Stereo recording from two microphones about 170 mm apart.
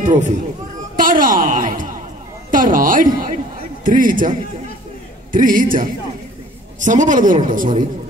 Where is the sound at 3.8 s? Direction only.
55° right (ahead or behind).